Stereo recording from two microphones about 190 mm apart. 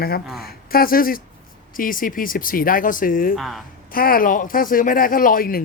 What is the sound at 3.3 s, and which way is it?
Speech, centre (ahead or behind).